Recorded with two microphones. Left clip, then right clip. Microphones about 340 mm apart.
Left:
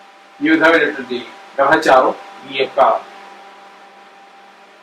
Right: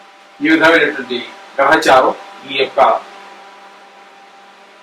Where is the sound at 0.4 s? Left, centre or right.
Centre.